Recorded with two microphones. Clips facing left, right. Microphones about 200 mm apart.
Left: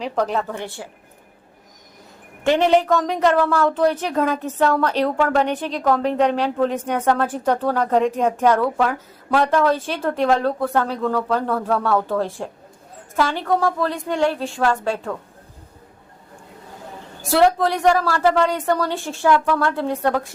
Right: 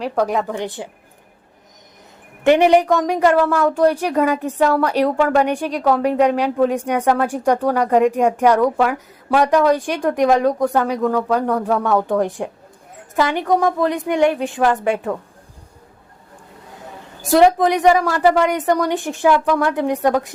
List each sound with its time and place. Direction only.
0.0 s a woman's voice: 10° right (ahead or behind)
2.4 s a woman's voice: 15° right (ahead or behind)
17.2 s a woman's voice: 15° right (ahead or behind)